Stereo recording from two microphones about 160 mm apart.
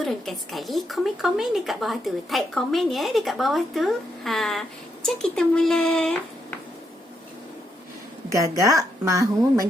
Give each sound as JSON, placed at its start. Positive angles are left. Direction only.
{"t": 0.0, "sound": "speech", "side_deg": 0}
{"t": 8.3, "sound": "a woman's voice", "side_deg": -20}